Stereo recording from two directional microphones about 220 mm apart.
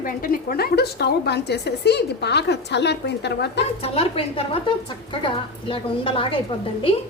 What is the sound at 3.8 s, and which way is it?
A woman's voice, 25° left (ahead or behind).